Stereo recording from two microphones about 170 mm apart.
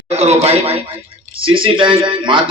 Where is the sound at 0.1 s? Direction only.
40° right (ahead or behind).